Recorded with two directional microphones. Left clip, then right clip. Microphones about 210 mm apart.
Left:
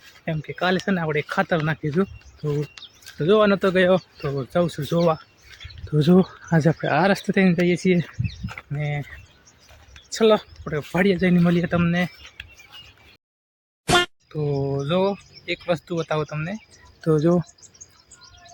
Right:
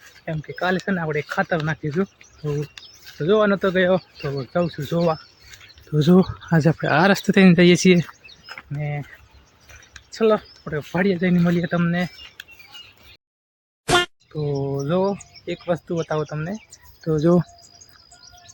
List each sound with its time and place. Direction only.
0.3 s speech: 15° left (ahead or behind)
5.5 s speech: centre (ahead or behind); by 7.5 s 15° right (ahead or behind)
7.5 s speech: 30° right (ahead or behind)
8.4 s speech: 20° left (ahead or behind)
10.1 s speech: 25° left (ahead or behind)
13.8 s a sound: centre (ahead or behind)
15.1 s speech: 5° left (ahead or behind)
17.0 s speech: 40° left (ahead or behind)